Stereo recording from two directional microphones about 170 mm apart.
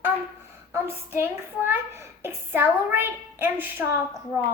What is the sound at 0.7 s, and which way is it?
A woman's voice, 15° right (ahead or behind).